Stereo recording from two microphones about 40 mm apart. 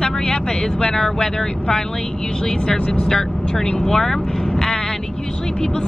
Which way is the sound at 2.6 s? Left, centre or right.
Left.